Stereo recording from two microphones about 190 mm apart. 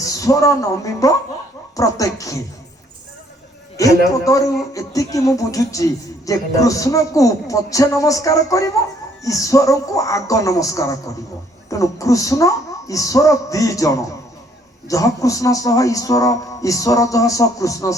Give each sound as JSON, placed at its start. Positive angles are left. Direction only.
{"t": 0.0, "sound": "a woman's voice", "side_deg": 15}
{"t": 3.8, "sound": "a man's voice", "side_deg": 15}